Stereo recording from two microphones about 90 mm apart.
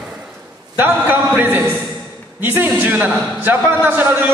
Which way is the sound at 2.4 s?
20° right (ahead or behind).